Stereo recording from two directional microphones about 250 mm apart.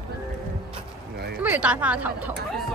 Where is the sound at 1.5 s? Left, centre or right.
Centre.